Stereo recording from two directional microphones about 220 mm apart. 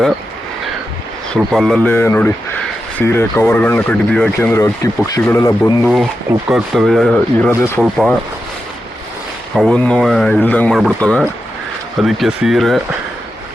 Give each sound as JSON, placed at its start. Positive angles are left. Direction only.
{"t": 1.3, "sound": "speech", "side_deg": 0}
{"t": 5.8, "sound": "speech", "side_deg": 0}
{"t": 7.8, "sound": "speech", "side_deg": -5}
{"t": 9.6, "sound": "speech", "side_deg": 5}